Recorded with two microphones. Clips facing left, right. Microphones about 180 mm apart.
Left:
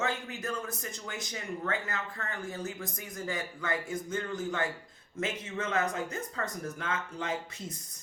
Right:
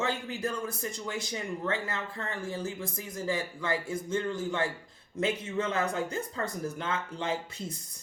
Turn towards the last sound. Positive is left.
turn(degrees=-30)  # may be behind; listen again after turning